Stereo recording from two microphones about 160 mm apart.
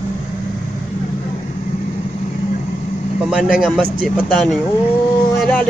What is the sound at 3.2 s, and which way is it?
Speech, 5° right (ahead or behind).